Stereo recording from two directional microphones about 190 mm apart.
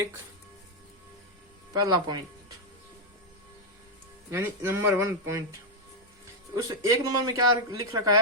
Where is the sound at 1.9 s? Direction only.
20° right (ahead or behind).